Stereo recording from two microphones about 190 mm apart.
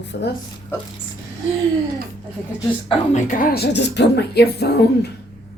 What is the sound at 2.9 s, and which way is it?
A woman's voice, 35° left (ahead or behind).